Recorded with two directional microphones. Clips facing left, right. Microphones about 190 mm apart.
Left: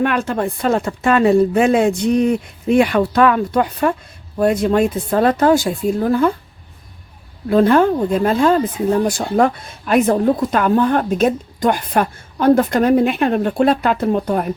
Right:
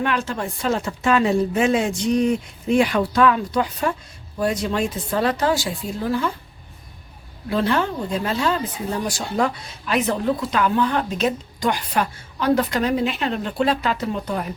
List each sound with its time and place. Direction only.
0.0 s speech: 55° left (ahead or behind)
7.5 s speech: 50° left (ahead or behind)